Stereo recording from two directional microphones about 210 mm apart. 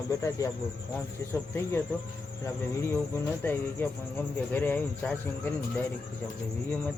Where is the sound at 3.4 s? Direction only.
10° left (ahead or behind).